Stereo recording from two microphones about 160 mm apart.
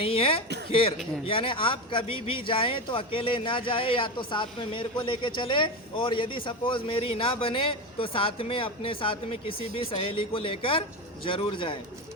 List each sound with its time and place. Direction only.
0.0 s speech: 35° left (ahead or behind)